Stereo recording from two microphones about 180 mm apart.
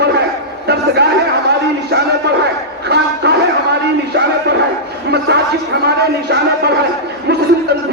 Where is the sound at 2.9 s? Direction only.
65° right (ahead or behind).